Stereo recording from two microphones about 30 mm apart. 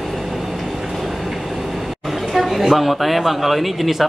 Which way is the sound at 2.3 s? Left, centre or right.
Centre.